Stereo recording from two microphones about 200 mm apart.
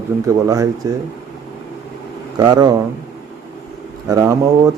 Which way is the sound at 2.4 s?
20° right (ahead or behind).